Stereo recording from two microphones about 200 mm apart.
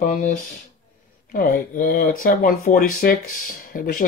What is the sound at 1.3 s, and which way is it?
Speech, 45° left (ahead or behind).